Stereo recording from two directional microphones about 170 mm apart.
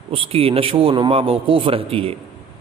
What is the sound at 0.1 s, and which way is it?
A man's voice, 35° right (ahead or behind).